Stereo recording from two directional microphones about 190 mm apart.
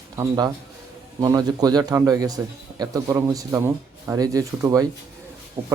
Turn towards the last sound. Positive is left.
turn(degrees=-15)  # may be behind; listen again after turning